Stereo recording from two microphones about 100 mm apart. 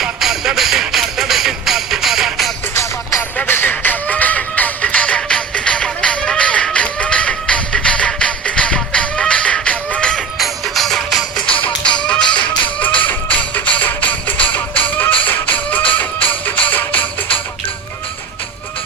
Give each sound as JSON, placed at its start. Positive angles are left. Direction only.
{"t": 0.0, "sound": "music", "side_deg": -5}
{"t": 2.7, "sound": "music", "side_deg": 25}
{"t": 12.4, "sound": "a sound", "side_deg": 15}
{"t": 13.0, "sound": "music", "side_deg": 15}